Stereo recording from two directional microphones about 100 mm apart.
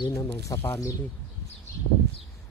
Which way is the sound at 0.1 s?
35° left (ahead or behind).